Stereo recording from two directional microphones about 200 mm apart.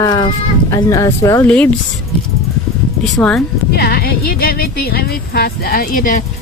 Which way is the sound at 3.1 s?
Centre (ahead or behind).